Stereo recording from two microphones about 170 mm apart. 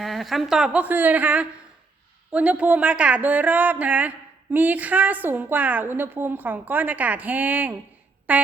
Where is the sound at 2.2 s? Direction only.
10° right (ahead or behind).